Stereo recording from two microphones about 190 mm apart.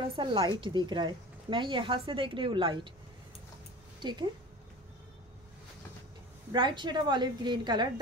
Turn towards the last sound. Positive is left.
turn(degrees=-25)  # may be behind; listen again after turning